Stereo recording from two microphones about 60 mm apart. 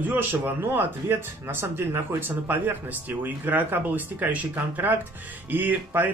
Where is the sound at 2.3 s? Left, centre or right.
Right.